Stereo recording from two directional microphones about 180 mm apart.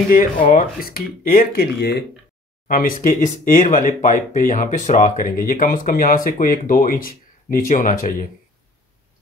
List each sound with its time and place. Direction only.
0.5 s speech: 50° left (ahead or behind)
2.7 s speech: 50° left (ahead or behind)